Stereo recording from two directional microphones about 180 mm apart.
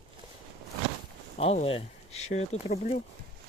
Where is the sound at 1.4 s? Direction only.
35° left (ahead or behind).